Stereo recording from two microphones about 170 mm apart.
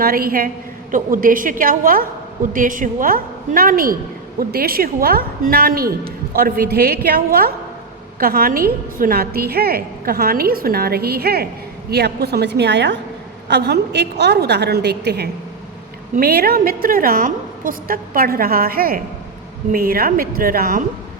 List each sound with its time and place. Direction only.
0.0 s a woman's voice: 60° right (ahead or behind)